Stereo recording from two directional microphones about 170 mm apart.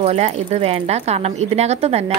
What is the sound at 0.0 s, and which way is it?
A woman's voice, 40° right (ahead or behind).